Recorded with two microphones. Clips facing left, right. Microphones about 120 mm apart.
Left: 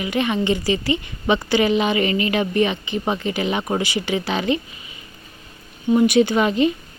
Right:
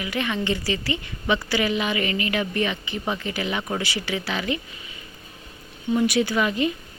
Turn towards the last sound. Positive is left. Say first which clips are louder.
# left 5 dB
turn(degrees=25)  # may be behind; listen again after turning